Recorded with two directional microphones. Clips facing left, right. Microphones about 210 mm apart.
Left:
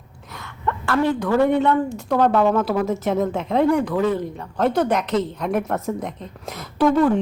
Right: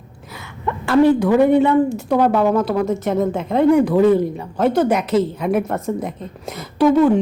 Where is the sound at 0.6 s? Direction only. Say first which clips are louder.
Right 7 dB; 15° right (ahead or behind).